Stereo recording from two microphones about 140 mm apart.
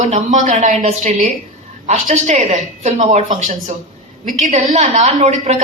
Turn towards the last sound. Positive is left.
turn(degrees=-55)  # may be behind; listen again after turning